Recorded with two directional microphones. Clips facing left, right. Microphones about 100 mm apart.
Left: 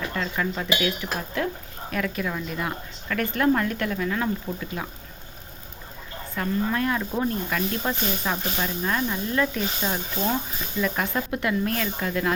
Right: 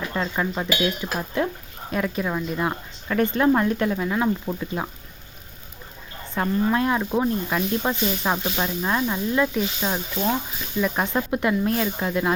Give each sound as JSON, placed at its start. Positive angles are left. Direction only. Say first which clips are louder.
{"t": 0.1, "sound": "speech", "louder": "right 2 dB", "side_deg": -25}
{"t": 6.3, "sound": "speech", "louder": "right 4 dB", "side_deg": -25}